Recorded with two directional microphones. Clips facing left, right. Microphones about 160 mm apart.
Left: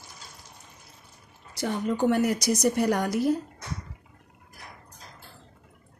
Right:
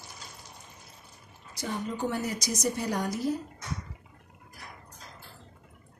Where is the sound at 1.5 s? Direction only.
65° left (ahead or behind).